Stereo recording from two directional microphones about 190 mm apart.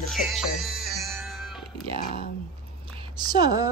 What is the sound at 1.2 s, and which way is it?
Music, centre (ahead or behind).